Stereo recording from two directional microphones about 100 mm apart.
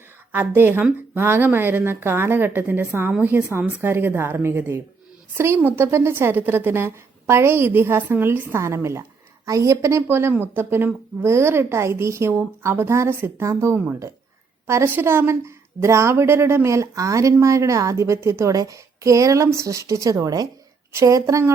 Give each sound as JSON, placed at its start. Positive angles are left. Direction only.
{"t": 0.3, "sound": "a woman's voice", "side_deg": -20}